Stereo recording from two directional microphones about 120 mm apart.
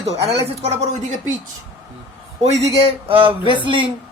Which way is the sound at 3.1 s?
45° right (ahead or behind).